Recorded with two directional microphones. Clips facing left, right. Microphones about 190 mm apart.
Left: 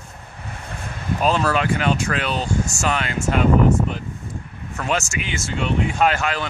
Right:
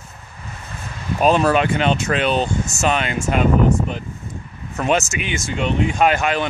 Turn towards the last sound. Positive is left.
turn(degrees=-20)  # may be behind; listen again after turning